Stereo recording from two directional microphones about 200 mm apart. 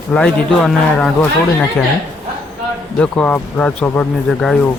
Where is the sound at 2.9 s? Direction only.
5° left (ahead or behind).